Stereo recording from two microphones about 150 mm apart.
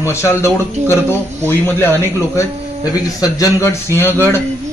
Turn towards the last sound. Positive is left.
turn(degrees=15)  # may be behind; listen again after turning